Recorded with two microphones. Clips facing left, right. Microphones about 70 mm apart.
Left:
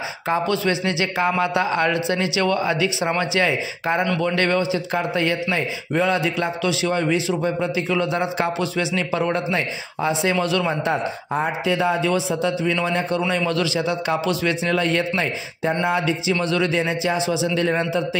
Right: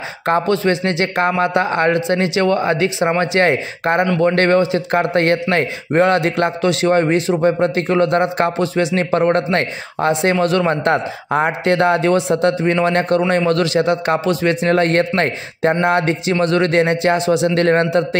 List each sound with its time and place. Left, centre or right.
0.5 s a man's voice: right
4.4 s a man's voice: right
5.0 s a man's voice: right
6.6 s a man's voice: right
16.3 s a man's voice: right